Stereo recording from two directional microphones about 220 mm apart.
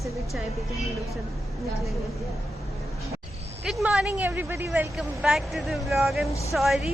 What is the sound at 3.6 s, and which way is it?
A woman's voice, centre (ahead or behind).